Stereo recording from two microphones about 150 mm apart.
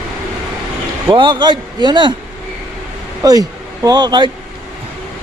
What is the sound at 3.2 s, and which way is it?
Speech, 25° right (ahead or behind).